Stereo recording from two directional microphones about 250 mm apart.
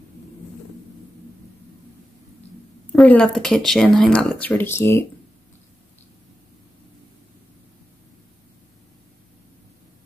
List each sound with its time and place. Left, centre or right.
2.9 s speech: centre